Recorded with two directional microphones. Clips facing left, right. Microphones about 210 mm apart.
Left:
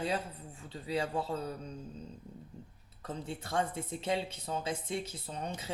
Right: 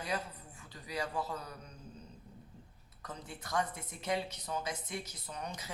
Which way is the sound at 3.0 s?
30° left (ahead or behind).